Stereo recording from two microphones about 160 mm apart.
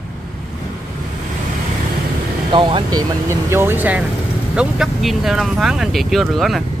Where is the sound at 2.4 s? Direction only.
30° right (ahead or behind).